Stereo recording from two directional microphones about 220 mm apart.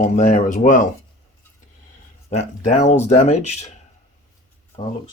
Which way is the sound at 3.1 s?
30° left (ahead or behind).